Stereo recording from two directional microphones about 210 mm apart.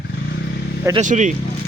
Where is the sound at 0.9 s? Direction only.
35° right (ahead or behind).